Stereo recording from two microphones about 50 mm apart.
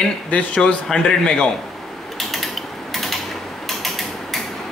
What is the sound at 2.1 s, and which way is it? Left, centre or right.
Mechanisms, centre.